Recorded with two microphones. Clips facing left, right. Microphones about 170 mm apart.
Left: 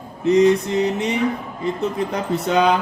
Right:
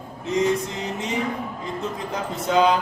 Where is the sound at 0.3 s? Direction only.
70° left (ahead or behind).